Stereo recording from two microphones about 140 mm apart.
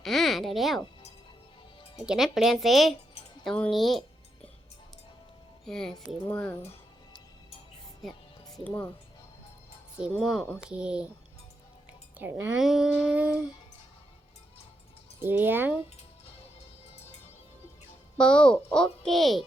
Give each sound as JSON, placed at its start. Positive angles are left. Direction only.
{"t": 0.0, "sound": "speech", "side_deg": 0}
{"t": 2.0, "sound": "speech", "side_deg": 0}
{"t": 5.6, "sound": "speech", "side_deg": 5}
{"t": 8.0, "sound": "speech", "side_deg": 0}
{"t": 8.6, "sound": "speech", "side_deg": 10}
{"t": 10.2, "sound": "speech", "side_deg": 0}
{"t": 12.1, "sound": "speech", "side_deg": -15}
{"t": 12.5, "sound": "speech", "side_deg": -5}
{"t": 15.2, "sound": "speech", "side_deg": -15}
{"t": 18.2, "sound": "speech", "side_deg": 5}